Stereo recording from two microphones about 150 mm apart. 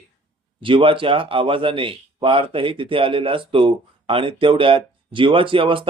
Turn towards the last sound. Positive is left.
turn(degrees=-35)  # may be behind; listen again after turning